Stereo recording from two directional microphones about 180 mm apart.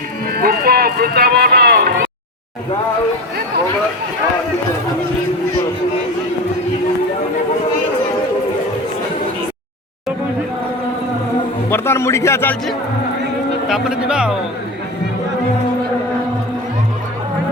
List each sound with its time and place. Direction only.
0.3 s a sound: 55° right (ahead or behind)
11.7 s music: 15° left (ahead or behind)
13.7 s speech: 5° right (ahead or behind)